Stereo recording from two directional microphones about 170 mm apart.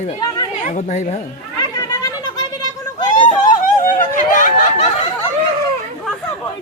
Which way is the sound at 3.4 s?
50° left (ahead or behind).